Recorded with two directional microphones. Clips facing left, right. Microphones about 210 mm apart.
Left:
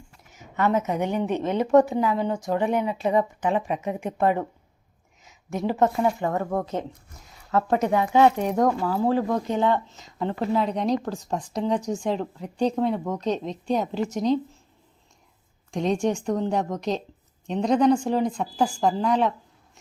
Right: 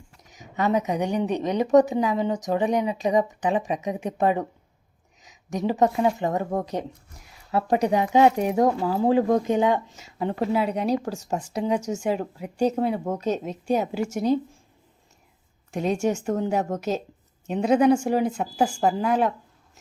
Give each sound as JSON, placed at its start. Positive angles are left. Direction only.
{"t": 0.3, "sound": "a woman's voice", "side_deg": -15}
{"t": 7.5, "sound": "speech", "side_deg": -15}
{"t": 15.7, "sound": "speech", "side_deg": -5}